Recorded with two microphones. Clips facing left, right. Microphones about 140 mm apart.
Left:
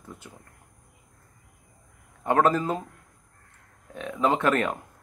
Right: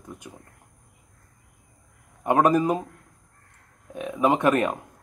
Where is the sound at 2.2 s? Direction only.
15° right (ahead or behind).